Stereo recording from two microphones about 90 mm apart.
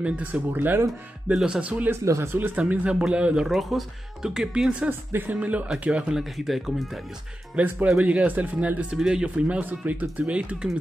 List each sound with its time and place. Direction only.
0.0 s speech: 15° right (ahead or behind)
1.3 s speech: 10° right (ahead or behind)
1.9 s speech: 30° right (ahead or behind); by 3.4 s 10° right (ahead or behind)
3.4 s speech: centre (ahead or behind)
7.5 s speech: 15° right (ahead or behind)